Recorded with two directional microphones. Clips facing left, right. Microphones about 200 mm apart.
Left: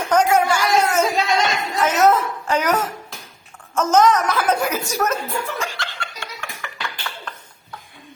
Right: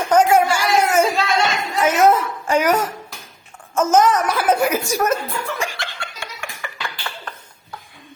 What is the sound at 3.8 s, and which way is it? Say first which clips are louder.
Chuckle: even; 10° right (ahead or behind).